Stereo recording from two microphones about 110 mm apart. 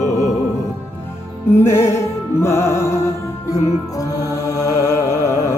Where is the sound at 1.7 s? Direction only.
25° left (ahead or behind).